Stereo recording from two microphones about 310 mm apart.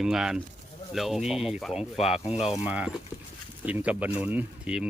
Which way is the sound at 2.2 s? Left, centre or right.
Centre.